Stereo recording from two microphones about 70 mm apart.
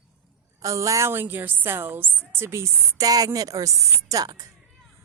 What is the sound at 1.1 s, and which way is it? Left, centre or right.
A woman's voice, right.